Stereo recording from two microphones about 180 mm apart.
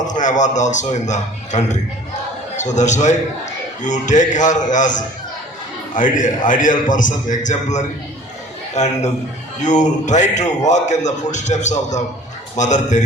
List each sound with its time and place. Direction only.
0.0 s a man's voice: 45° left (ahead or behind)